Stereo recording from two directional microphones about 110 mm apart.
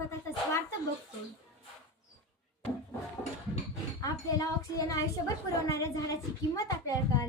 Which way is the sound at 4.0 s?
35° left (ahead or behind).